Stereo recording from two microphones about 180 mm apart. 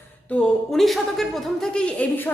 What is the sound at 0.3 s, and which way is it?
A man's voice, centre (ahead or behind).